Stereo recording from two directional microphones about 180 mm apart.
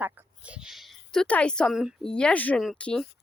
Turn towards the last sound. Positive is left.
turn(degrees=5)  # may be behind; listen again after turning